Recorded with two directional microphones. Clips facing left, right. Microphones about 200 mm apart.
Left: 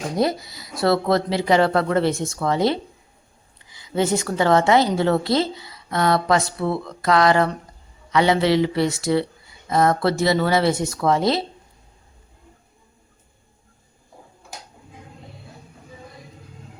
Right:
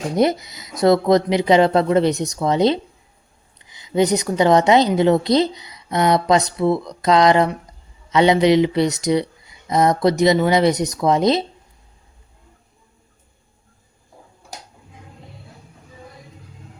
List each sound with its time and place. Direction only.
0.2 s a woman's voice: 20° right (ahead or behind)